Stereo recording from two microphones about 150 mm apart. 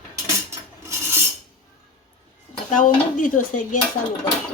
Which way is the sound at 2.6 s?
55° left (ahead or behind).